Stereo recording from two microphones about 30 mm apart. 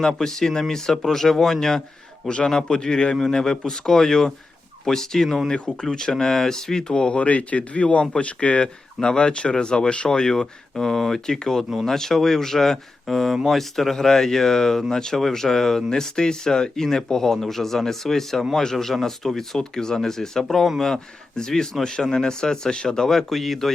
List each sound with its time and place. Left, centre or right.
0.2 s speech: centre
2.2 s speech: left
2.5 s speech: centre
5.5 s speech: left
5.9 s speech: left
6.8 s speech: left
7.2 s speech: left
8.6 s speech: left
13.1 s speech: centre
20.4 s speech: centre
20.9 s speech: left
23.3 s speech: centre